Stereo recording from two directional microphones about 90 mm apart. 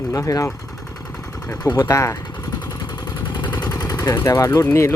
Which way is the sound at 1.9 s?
35° left (ahead or behind).